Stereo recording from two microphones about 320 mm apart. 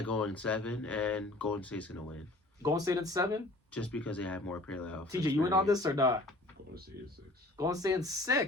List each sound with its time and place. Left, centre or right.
0.0 s speech: centre
2.6 s speech: centre
3.7 s speech: centre
5.0 s speech: centre
6.9 s speech: right
7.5 s speech: centre